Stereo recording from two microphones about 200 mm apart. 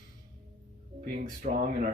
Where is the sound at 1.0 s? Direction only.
45° right (ahead or behind).